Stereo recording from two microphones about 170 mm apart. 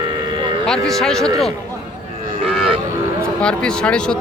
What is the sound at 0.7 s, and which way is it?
Speech, centre (ahead or behind).